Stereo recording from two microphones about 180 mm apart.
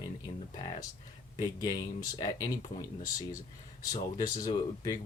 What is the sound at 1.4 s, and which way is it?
Speech, 20° left (ahead or behind).